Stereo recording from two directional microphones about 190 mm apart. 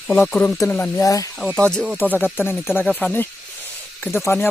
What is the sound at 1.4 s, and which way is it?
Speech, 15° right (ahead or behind).